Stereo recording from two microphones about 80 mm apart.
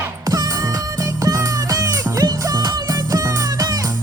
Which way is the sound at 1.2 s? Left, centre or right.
Right.